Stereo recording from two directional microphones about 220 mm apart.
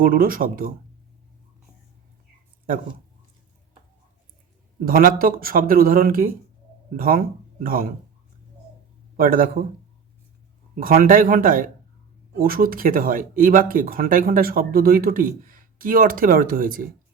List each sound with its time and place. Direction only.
0.0 s speech: 40° right (ahead or behind)
4.9 s speech: 40° right (ahead or behind)
9.1 s speech: 40° right (ahead or behind)
10.8 s speech: 40° right (ahead or behind)